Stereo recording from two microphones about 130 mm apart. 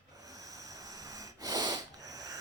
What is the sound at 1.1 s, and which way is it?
Wheeze, 30° right (ahead or behind).